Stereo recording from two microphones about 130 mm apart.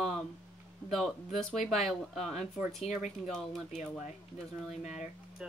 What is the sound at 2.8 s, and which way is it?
Speech, 65° left (ahead or behind).